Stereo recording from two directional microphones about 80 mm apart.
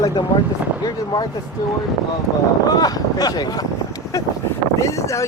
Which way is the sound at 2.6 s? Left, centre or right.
Left.